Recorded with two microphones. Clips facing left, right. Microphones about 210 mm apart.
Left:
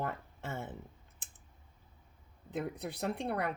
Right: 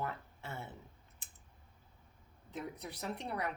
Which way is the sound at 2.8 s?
60° left (ahead or behind).